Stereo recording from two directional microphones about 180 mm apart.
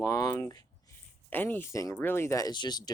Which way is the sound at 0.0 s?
20° left (ahead or behind).